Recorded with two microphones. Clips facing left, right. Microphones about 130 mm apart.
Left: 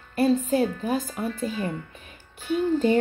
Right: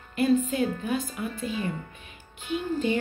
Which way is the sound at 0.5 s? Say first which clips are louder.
Left 4 dB; 35° left (ahead or behind).